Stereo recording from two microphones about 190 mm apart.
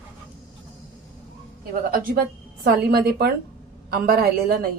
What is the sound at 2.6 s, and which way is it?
A woman's voice, 55° right (ahead or behind).